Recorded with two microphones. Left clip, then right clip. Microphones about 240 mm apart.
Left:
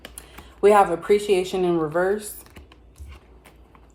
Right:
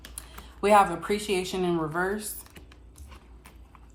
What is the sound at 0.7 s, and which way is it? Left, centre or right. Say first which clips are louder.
A woman's voice: left 3 dB; centre.